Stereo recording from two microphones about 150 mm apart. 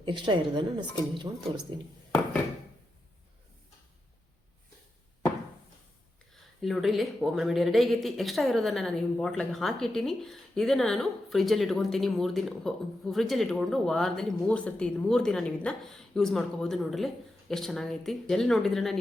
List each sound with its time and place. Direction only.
0.0 s a woman's voice: 35° right (ahead or behind)
6.3 s speech: centre (ahead or behind)